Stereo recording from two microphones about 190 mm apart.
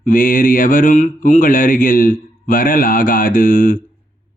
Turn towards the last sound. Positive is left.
turn(degrees=45)  # may be behind; listen again after turning